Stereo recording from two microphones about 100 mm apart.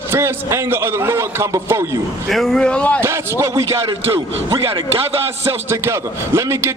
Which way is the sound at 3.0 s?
25° right (ahead or behind).